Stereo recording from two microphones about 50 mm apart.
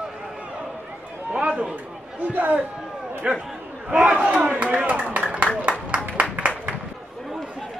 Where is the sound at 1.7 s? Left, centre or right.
Right.